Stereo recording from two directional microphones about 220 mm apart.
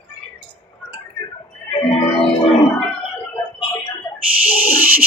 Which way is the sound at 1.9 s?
25° left (ahead or behind).